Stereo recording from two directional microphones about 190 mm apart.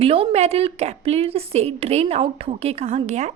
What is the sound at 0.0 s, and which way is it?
A woman's voice, 30° right (ahead or behind).